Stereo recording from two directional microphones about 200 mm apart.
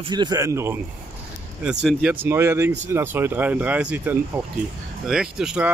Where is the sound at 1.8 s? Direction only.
5° right (ahead or behind).